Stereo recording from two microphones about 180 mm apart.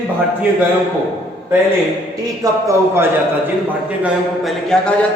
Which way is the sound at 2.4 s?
15° right (ahead or behind).